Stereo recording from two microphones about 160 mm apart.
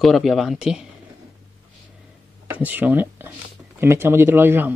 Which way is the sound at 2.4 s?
10° right (ahead or behind).